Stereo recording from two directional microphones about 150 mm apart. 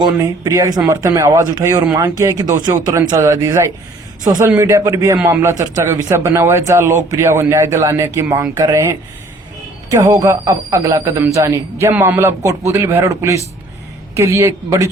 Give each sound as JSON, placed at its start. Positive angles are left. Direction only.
{"t": 0.0, "sound": "speech", "side_deg": -25}